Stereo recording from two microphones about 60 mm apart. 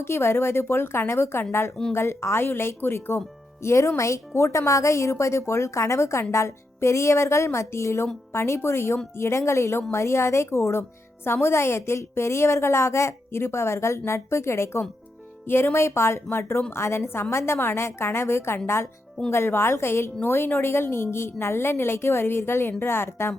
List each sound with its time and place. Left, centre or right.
0.0 s a woman's voice: left